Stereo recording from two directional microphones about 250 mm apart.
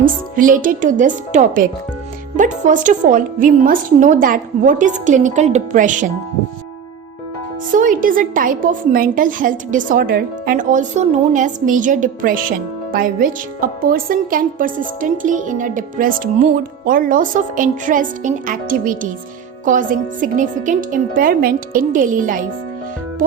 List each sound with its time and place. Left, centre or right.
0.0 s a woman's voice: right
7.7 s a woman's voice: right